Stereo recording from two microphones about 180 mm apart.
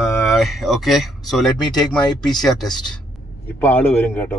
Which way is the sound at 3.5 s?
10° left (ahead or behind).